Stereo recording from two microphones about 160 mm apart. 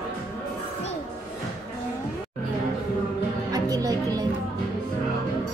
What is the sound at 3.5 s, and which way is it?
Music, 20° right (ahead or behind).